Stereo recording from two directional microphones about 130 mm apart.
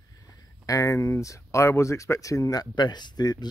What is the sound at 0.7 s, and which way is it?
Speech, 25° left (ahead or behind).